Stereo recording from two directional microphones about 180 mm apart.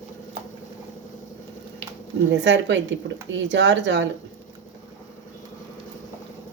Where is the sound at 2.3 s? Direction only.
80° right.